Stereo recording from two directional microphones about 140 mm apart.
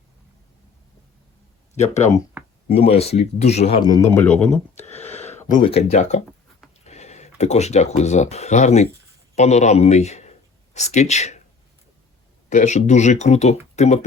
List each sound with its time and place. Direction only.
1.7 s speech: 55° left (ahead or behind)
2.6 s speech: 45° left (ahead or behind)
3.8 s a man's voice: 25° left (ahead or behind)
4.4 s speech: 5° left (ahead or behind)
4.8 s a sound: 50° left (ahead or behind)
5.6 s a man's voice: 50° left (ahead or behind)
12.5 s speech: 60° left (ahead or behind)